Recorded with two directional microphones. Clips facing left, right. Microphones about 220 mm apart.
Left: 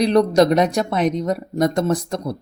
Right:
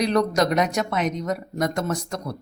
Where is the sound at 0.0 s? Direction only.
35° left (ahead or behind).